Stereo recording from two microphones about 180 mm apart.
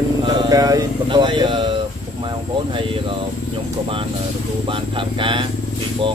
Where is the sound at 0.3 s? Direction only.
20° right (ahead or behind).